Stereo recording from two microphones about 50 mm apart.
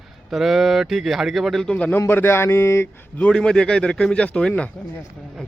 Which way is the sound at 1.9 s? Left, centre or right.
Left.